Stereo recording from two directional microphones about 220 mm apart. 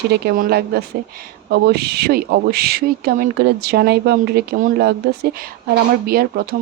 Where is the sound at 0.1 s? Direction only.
45° right (ahead or behind).